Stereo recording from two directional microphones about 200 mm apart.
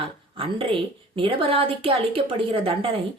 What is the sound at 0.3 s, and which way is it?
Speech, 25° right (ahead or behind).